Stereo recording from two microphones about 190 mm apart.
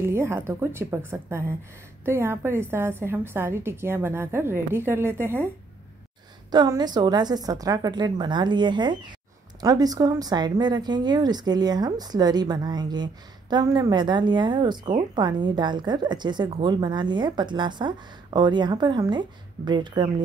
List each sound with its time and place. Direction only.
0.0 s a woman's voice: 15° right (ahead or behind)
6.5 s speech: 20° right (ahead or behind)